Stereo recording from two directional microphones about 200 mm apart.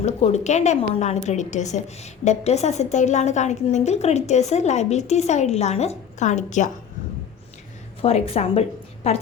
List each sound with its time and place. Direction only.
0.0 s a woman's voice: 35° left (ahead or behind)
8.0 s a woman's voice: 30° left (ahead or behind)